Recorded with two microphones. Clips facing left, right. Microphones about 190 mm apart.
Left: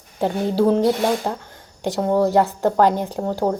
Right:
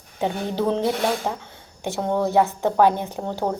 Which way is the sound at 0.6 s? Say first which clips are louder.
Left 6 dB; 5° left (ahead or behind).